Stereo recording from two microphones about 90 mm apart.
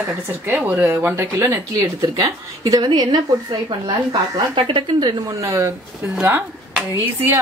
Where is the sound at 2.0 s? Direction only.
40° right (ahead or behind).